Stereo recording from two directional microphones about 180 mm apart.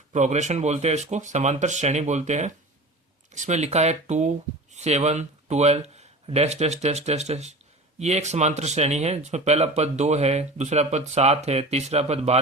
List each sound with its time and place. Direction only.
0.1 s speech: 40° right (ahead or behind)